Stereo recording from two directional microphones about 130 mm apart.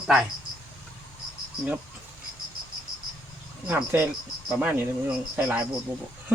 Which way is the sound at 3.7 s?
15° right (ahead or behind).